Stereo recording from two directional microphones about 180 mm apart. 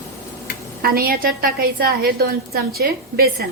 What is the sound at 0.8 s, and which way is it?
A woman's voice, 55° right (ahead or behind).